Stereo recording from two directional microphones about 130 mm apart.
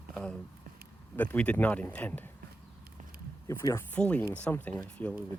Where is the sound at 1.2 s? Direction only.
10° left (ahead or behind).